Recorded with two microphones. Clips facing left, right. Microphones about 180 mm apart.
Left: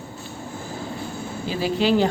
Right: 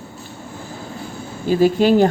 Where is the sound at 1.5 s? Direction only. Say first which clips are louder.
Right 7 dB; 50° right (ahead or behind).